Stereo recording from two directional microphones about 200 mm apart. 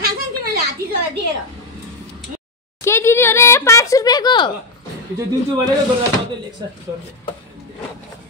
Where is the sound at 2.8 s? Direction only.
15° left (ahead or behind).